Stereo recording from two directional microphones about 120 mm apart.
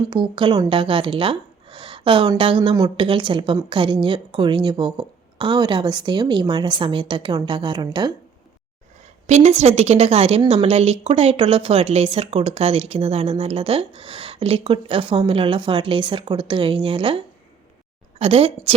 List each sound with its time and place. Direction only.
0.1 s a woman's voice: 40° right (ahead or behind)
9.2 s a woman's voice: 65° right (ahead or behind)